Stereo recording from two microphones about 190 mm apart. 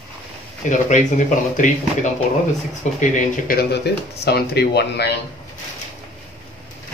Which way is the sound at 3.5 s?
55° left (ahead or behind).